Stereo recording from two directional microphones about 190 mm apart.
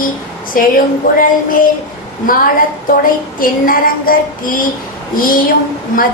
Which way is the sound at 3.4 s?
50° left (ahead or behind).